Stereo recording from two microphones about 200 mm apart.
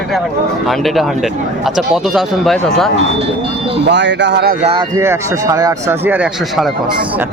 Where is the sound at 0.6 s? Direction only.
Centre (ahead or behind).